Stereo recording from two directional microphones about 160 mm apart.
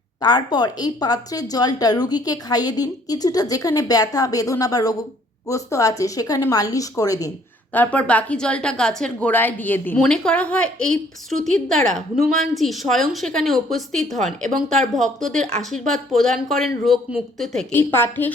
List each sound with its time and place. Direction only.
0.2 s a woman's voice: 25° left (ahead or behind)
7.7 s a woman's voice: 10° left (ahead or behind)
11.3 s speech: 50° right (ahead or behind)
11.7 s speech: 5° left (ahead or behind)
14.5 s speech: 50° right (ahead or behind)
14.9 s speech: centre (ahead or behind)
17.7 s a woman's voice: 15° left (ahead or behind)